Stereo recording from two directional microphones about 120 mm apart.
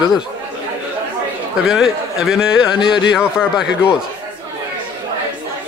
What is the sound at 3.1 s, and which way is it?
Speech, 5° right (ahead or behind).